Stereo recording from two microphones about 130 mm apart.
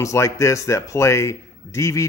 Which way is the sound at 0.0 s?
25° left (ahead or behind).